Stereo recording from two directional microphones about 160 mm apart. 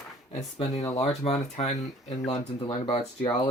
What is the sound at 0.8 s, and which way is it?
Speech, 20° left (ahead or behind).